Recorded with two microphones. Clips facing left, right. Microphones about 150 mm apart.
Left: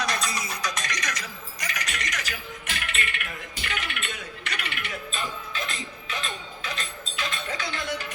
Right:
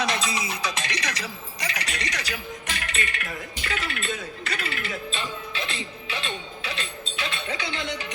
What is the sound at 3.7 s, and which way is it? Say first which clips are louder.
Music: right 4 dB; 35° right (ahead or behind).